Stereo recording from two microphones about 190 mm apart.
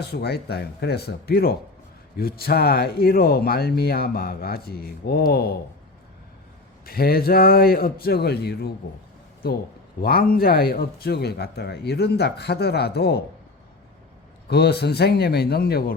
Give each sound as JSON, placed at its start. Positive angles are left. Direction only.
{"t": 0.0, "sound": "speech", "side_deg": 60}
{"t": 6.8, "sound": "speech", "side_deg": 50}
{"t": 10.0, "sound": "speech", "side_deg": 50}
{"t": 14.4, "sound": "speech", "side_deg": 60}